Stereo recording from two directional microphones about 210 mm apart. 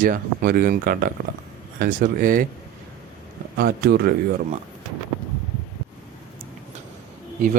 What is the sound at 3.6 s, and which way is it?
Speech, 45° right (ahead or behind).